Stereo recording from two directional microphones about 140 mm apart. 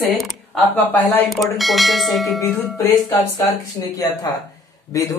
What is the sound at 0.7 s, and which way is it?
Speech, 15° left (ahead or behind).